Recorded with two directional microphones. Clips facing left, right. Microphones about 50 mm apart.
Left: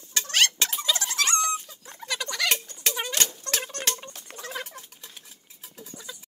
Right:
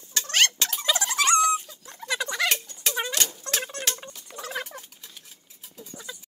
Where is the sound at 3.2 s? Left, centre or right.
Centre.